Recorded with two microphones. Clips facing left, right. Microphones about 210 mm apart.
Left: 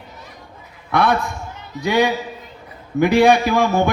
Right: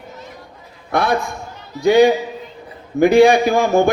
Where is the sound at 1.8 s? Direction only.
50° right (ahead or behind).